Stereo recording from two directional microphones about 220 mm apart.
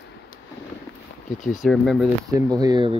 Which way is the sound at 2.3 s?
15° right (ahead or behind).